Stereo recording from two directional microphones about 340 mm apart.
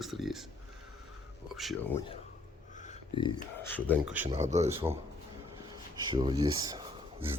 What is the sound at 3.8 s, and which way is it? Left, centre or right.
Speech, centre.